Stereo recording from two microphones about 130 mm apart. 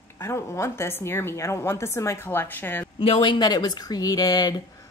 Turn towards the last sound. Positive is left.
turn(degrees=30)  # may be behind; listen again after turning